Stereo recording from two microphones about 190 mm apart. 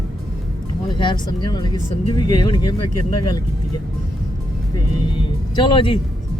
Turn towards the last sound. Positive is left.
turn(degrees=25)  # may be behind; listen again after turning